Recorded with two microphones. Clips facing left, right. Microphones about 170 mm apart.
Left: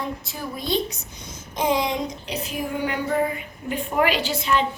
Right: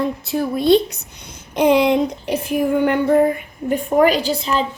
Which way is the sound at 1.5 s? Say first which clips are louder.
Right 9 dB; 65° right (ahead or behind).